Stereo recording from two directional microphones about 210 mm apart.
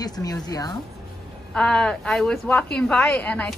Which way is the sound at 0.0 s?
20° left (ahead or behind).